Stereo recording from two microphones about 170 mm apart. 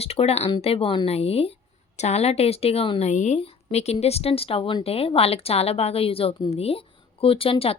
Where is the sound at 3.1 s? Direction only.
45° left (ahead or behind).